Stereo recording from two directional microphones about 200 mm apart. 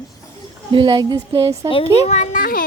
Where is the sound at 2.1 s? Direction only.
35° left (ahead or behind).